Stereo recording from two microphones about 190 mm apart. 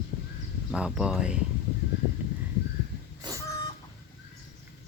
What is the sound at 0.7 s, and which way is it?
Speech, 5° right (ahead or behind).